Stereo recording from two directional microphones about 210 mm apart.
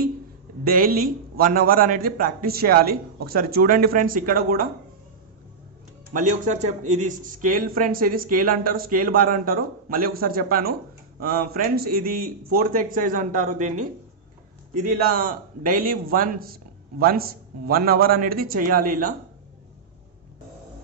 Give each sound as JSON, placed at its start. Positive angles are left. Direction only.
{"t": 0.7, "sound": "a man's voice", "side_deg": -45}
{"t": 6.1, "sound": "a man's voice", "side_deg": -35}